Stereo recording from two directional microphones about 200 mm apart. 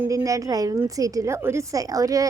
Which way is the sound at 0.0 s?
15° right (ahead or behind).